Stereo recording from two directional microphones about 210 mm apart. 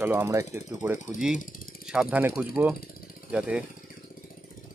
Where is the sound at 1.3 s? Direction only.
40° left (ahead or behind).